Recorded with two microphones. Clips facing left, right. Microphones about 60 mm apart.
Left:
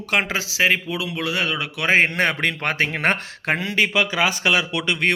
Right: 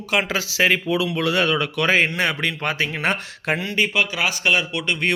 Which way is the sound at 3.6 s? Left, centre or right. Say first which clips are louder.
Left 2 dB; left.